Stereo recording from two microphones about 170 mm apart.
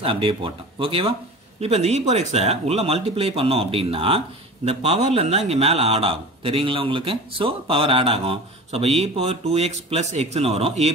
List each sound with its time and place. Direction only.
0.0 s speech: 30° right (ahead or behind)